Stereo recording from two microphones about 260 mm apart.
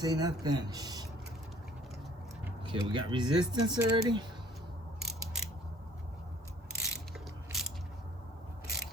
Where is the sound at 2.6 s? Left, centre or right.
Centre.